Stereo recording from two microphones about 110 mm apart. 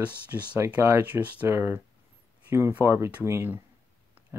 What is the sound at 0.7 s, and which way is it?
Speech, 25° right (ahead or behind).